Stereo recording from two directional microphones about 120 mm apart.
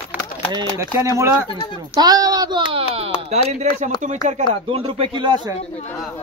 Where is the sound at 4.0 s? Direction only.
80° right.